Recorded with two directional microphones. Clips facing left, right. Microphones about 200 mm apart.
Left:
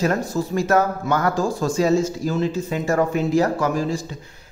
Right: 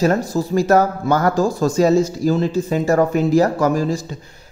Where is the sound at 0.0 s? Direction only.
35° right (ahead or behind).